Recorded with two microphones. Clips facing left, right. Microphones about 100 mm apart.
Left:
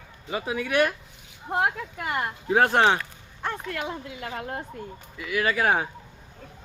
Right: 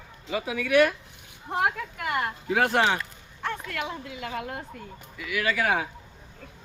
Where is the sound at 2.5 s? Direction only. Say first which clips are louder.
Left 4 dB; 40° left (ahead or behind).